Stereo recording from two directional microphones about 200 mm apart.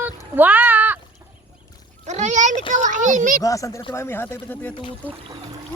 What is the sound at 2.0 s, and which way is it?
A child's voice, 35° right (ahead or behind).